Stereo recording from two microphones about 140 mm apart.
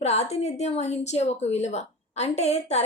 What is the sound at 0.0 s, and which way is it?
A woman's voice, 50° left (ahead or behind).